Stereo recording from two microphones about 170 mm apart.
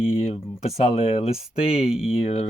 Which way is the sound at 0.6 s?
40° left (ahead or behind).